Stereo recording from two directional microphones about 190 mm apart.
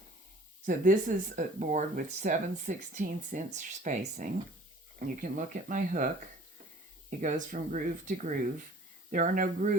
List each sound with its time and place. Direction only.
0.6 s speech: 45° right (ahead or behind)
7.2 s speech: 40° right (ahead or behind)